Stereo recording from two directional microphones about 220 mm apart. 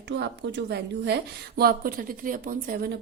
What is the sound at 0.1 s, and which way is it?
A woman's voice, 50° right (ahead or behind).